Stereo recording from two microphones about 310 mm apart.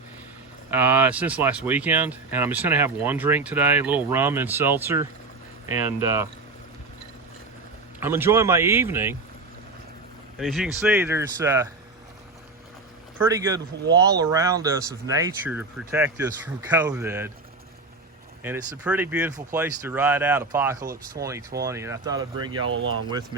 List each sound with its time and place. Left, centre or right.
0.7 s speech: centre
8.0 s speech: centre
10.3 s speech: centre
13.2 s speech: centre
18.4 s speech: centre
20.9 s speech: right
21.7 s speech: centre